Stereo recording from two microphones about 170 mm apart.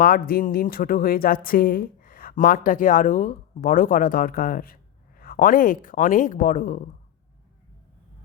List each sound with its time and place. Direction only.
0.0 s speech: 60° left (ahead or behind)